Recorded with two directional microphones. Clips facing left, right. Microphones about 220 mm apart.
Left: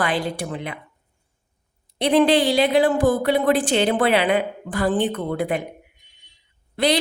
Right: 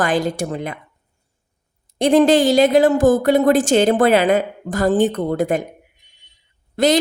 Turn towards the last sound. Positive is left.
turn(degrees=-45)  # may be behind; listen again after turning